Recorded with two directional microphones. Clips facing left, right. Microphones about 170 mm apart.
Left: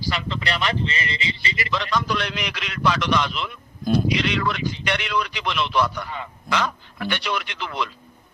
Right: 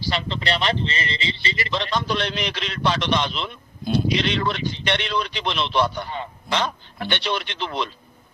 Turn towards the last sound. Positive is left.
turn(degrees=-30)  # may be behind; listen again after turning